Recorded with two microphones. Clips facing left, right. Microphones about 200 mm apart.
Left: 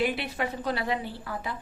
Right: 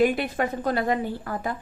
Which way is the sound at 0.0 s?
50° right (ahead or behind).